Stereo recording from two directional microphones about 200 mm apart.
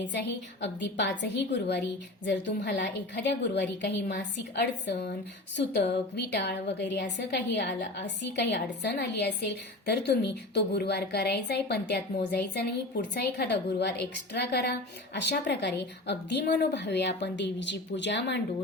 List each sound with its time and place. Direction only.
0.6 s a woman's voice: 60° left (ahead or behind)